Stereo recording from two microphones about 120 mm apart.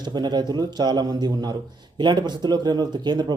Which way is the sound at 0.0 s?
35° right (ahead or behind).